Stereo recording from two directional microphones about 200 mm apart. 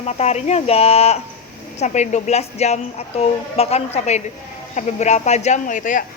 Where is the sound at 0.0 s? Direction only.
30° left (ahead or behind).